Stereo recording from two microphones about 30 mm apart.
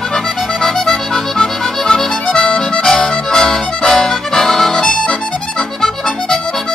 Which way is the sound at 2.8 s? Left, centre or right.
Centre.